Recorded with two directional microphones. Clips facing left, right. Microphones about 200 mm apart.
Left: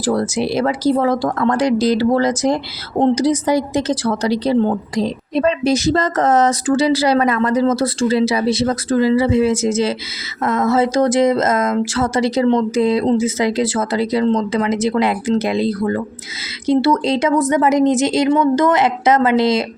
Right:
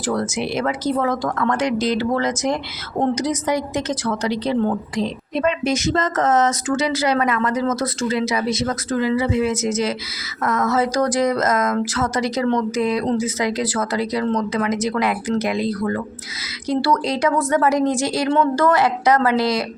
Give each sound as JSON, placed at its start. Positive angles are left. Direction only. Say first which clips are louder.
{"t": 0.0, "sound": "a woman's voice", "louder": "left 4 dB", "side_deg": 35}